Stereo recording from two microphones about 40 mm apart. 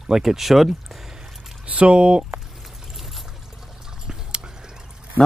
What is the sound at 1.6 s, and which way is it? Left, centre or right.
Speech, right.